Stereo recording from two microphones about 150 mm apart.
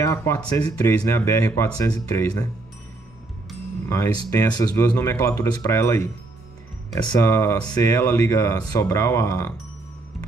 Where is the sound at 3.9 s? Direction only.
20° left (ahead or behind).